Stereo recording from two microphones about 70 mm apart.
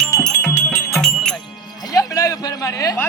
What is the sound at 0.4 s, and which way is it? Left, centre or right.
Music, left.